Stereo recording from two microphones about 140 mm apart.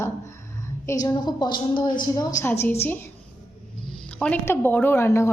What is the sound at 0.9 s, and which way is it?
A woman's voice, 25° left (ahead or behind).